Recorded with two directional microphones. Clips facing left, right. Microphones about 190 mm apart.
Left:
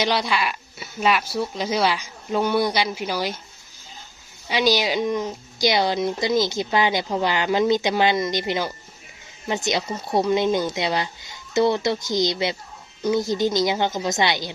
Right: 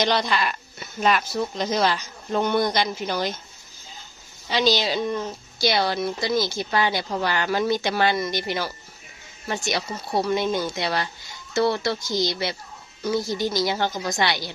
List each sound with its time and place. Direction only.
0.0 s speech: 5° left (ahead or behind)
4.4 s speech: 10° left (ahead or behind)